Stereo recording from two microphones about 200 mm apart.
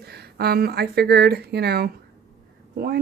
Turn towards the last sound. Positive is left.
turn(degrees=-50)  # may be behind; listen again after turning